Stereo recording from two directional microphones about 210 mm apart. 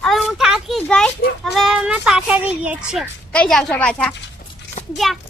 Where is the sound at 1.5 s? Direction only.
Centre (ahead or behind).